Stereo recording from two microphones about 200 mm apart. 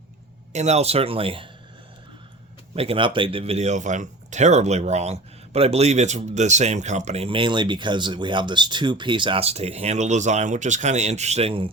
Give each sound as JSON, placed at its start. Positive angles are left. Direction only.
{"t": 0.5, "sound": "speech", "side_deg": -35}
{"t": 2.7, "sound": "speech", "side_deg": -30}